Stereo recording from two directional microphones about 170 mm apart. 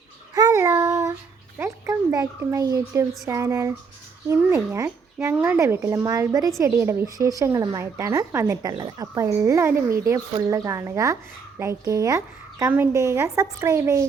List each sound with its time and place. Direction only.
0.3 s child singing: 20° right (ahead or behind)
1.5 s a child's voice: 15° right (ahead or behind)